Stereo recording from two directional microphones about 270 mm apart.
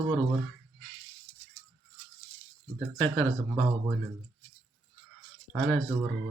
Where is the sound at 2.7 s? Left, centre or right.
Centre.